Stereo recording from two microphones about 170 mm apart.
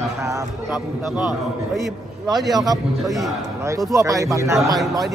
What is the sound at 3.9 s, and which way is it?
Speech, 20° right (ahead or behind).